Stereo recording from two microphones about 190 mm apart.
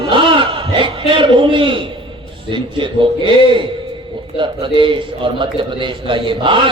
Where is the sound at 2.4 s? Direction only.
25° right (ahead or behind).